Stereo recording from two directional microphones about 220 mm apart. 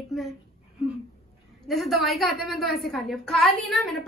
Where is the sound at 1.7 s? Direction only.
Centre (ahead or behind).